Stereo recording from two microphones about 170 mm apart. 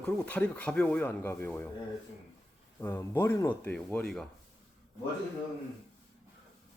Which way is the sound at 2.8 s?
15° left (ahead or behind).